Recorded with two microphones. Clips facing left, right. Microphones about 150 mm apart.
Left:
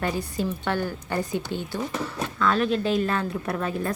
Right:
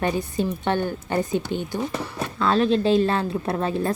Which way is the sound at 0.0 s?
20° right (ahead or behind).